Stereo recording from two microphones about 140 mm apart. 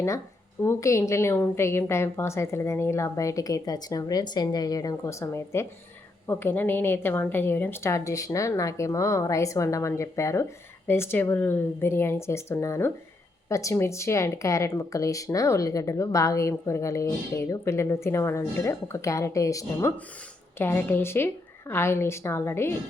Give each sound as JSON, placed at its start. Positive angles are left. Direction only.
{"t": 0.6, "sound": "a woman's voice", "side_deg": 20}